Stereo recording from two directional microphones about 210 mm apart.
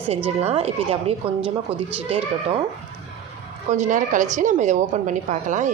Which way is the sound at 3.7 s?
35° right (ahead or behind).